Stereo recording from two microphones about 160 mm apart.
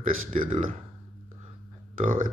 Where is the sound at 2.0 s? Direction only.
55° right (ahead or behind).